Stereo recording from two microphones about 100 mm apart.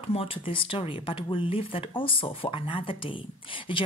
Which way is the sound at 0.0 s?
80° left.